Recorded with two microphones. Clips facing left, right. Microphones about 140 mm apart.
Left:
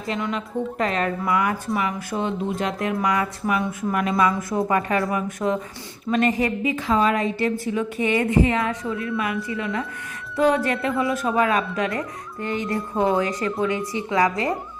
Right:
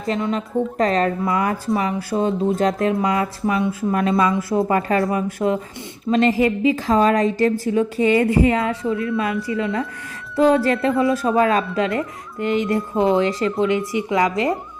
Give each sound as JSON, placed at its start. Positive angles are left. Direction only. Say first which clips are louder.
{"t": 0.1, "sound": "a woman's voice", "louder": "right 5 dB", "side_deg": -30}